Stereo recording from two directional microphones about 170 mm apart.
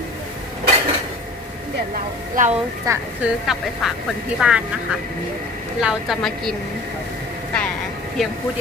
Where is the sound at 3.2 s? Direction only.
5° right (ahead or behind).